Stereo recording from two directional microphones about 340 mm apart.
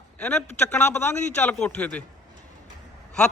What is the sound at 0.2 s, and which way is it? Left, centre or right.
A man's voice, centre.